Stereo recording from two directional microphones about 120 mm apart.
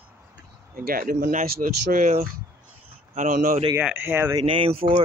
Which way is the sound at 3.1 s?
90° right.